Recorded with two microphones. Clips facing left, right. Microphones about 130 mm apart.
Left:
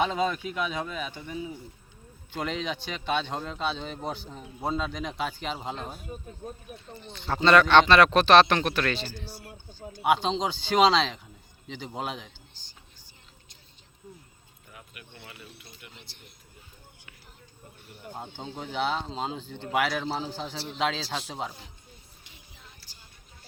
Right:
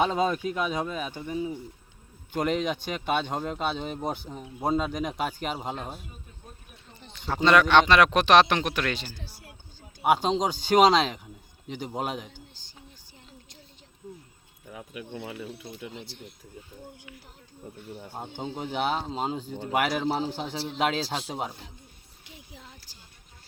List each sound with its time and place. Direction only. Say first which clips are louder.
0.0 s speech: right 2 dB; 40° right (ahead or behind)
2.3 s a man's voice: right 5 dB; 10° right (ahead or behind)
2.8 s a man's voice: right 2 dB; 50° right (ahead or behind)
3.2 s a man's voice: right 2 dB; 15° right (ahead or behind)
7.3 s a man's voice: left 1 dB; 15° right (ahead or behind)
10.2 s a man's voice: right 2 dB; 10° right (ahead or behind)
10.8 s a man's voice: right 2 dB; 45° right (ahead or behind)
11.7 s a man's voice: right 3 dB; 10° right (ahead or behind)
18.2 s a man's voice: right 4 dB; 10° right (ahead or behind)
20.3 s a man's voice: right 3 dB; 60° right (ahead or behind)
21.1 s a man's voice: right 2 dB; 15° right (ahead or behind)